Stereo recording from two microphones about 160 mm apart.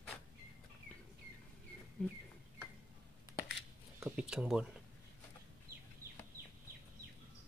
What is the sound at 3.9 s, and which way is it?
Speech, 10° right (ahead or behind).